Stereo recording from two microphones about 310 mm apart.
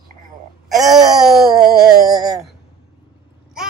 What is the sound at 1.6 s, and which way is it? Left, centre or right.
Music, centre.